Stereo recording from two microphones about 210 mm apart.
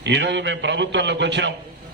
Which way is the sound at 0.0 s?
55° right (ahead or behind).